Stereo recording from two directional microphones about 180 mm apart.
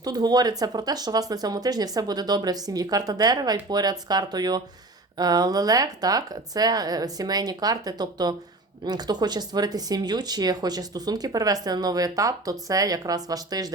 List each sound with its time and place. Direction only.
0.0 s speech: 20° right (ahead or behind)